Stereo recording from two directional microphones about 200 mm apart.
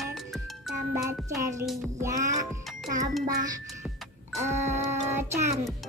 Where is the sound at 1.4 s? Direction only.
15° right (ahead or behind).